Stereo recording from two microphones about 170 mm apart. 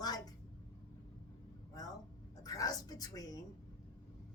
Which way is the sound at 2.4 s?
20° left (ahead or behind).